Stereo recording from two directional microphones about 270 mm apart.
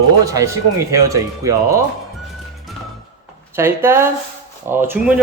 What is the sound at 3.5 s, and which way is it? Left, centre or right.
Speech, centre.